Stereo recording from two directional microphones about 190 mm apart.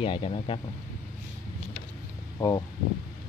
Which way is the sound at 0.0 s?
30° left (ahead or behind).